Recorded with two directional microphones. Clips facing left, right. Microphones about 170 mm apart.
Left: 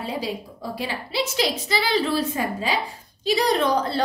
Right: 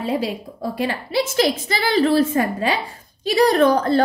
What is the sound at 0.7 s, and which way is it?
A woman's voice, 55° right (ahead or behind).